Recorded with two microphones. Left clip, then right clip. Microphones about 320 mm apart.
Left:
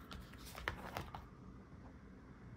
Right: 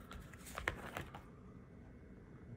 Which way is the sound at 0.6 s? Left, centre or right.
Centre.